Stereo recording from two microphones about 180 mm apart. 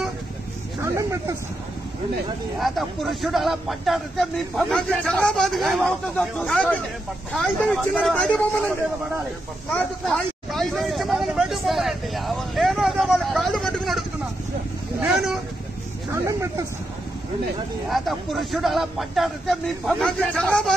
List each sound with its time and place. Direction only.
0.8 s snake: 15° right (ahead or behind)
2.6 s speech: centre (ahead or behind)
9.7 s a sound: 5° left (ahead or behind)
16.3 s speech: 20° right (ahead or behind)
17.8 s speech: centre (ahead or behind)